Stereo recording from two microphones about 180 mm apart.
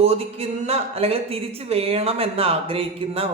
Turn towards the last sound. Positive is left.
turn(degrees=-30)  # may be behind; listen again after turning